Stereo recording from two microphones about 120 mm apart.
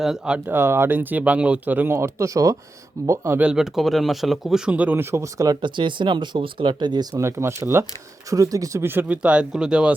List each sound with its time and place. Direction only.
0.0 s speech: 5° right (ahead or behind); by 3.4 s 25° right (ahead or behind)
3.4 s speech: 5° right (ahead or behind); by 5.5 s 25° right (ahead or behind)
5.6 s speech: 40° right (ahead or behind)
7.2 s speech: 25° right (ahead or behind); by 9.9 s 10° right (ahead or behind)